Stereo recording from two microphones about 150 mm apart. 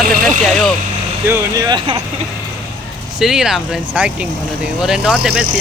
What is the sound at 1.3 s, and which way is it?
Speech, 25° right (ahead or behind).